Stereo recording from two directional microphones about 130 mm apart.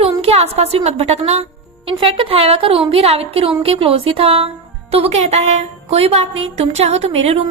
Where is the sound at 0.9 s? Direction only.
55° right (ahead or behind).